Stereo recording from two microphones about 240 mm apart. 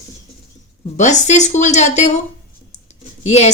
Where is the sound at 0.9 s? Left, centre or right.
Left.